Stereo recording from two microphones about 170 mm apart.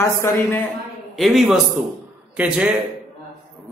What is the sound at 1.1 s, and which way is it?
Speech, centre (ahead or behind).